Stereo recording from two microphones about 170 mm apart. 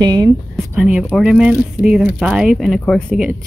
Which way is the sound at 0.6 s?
5° right (ahead or behind).